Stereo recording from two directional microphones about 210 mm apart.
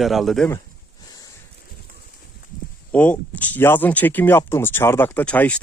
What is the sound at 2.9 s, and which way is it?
Speech, 5° left (ahead or behind).